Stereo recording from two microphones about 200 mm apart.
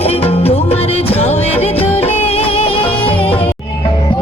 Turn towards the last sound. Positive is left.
turn(degrees=25)  # may be behind; listen again after turning